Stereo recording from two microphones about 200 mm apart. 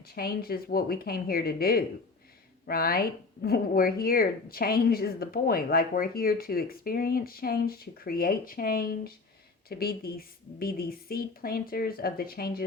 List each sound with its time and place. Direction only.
0.1 s speech: 50° left (ahead or behind)